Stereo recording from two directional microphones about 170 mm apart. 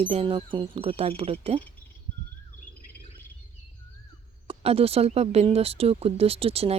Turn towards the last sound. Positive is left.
turn(degrees=-35)  # may be behind; listen again after turning